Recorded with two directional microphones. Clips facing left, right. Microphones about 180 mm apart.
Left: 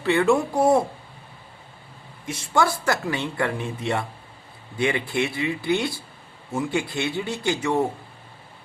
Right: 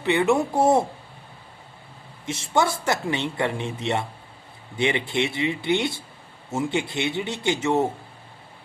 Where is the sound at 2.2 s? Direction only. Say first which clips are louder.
Even; 25° right (ahead or behind).